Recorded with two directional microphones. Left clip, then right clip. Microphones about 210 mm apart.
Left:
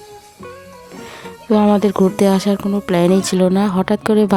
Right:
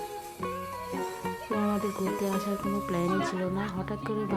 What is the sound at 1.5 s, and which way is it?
A woman's voice, 55° left (ahead or behind).